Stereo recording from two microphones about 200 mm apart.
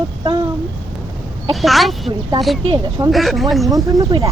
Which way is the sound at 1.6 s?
Centre (ahead or behind).